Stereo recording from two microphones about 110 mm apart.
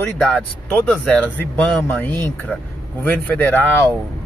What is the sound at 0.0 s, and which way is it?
Speech, 10° left (ahead or behind).